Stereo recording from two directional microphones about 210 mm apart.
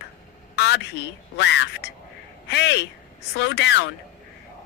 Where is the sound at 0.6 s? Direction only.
55° left (ahead or behind).